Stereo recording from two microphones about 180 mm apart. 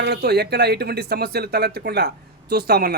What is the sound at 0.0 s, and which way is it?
A man's voice, 65° right (ahead or behind).